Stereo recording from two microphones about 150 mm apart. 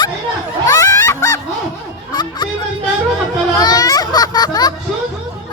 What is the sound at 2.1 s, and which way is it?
Chatter, 25° left (ahead or behind).